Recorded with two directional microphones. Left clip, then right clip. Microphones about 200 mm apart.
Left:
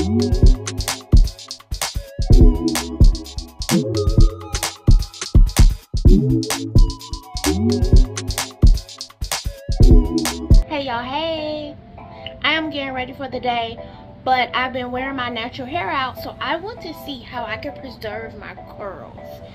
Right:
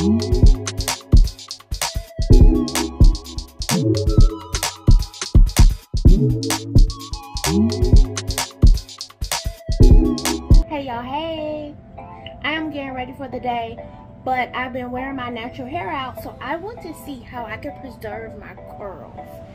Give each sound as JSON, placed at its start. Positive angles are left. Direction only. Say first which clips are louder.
{"t": 0.0, "sound": "music", "louder": "even", "side_deg": 0}
{"t": 10.7, "sound": "music", "louder": "left 4 dB", "side_deg": -15}
{"t": 12.4, "sound": "music", "louder": "left 4 dB", "side_deg": -15}
{"t": 14.2, "sound": "a woman's voice", "louder": "left 4 dB", "side_deg": -15}